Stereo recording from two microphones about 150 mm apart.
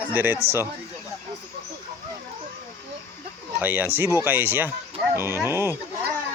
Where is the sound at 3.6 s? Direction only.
10° right (ahead or behind).